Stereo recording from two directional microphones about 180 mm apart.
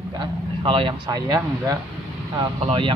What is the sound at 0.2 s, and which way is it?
Speech, 30° right (ahead or behind).